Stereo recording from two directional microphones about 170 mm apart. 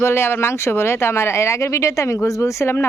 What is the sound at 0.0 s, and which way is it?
Speech, 15° left (ahead or behind).